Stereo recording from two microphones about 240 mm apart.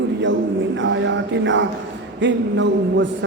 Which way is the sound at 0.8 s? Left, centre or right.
Right.